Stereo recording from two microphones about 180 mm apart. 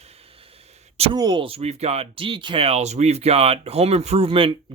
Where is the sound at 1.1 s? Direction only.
25° right (ahead or behind).